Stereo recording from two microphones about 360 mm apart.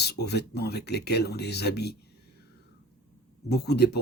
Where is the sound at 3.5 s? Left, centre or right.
Left.